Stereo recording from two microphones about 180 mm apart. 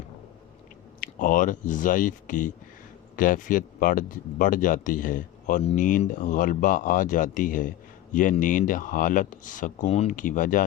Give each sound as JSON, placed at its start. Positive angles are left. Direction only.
{"t": 1.0, "sound": "speech", "side_deg": 50}